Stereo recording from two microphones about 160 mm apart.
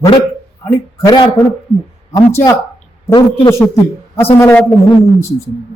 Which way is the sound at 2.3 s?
15° left (ahead or behind).